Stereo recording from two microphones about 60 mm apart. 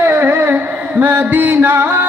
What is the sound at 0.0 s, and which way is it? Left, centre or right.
Carnatic music, right.